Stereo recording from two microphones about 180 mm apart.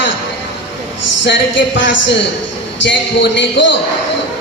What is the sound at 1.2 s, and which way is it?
Speech, 90° left.